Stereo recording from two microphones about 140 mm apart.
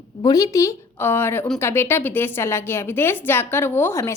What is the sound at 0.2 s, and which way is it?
A woman's voice, 25° left (ahead or behind).